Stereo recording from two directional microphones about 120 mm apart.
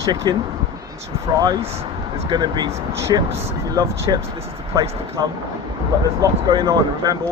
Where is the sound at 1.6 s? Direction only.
60° right (ahead or behind).